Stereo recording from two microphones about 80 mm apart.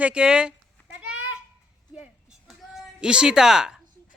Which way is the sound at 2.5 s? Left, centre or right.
Centre.